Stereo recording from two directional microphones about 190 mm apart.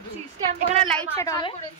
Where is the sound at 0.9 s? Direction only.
5° left (ahead or behind).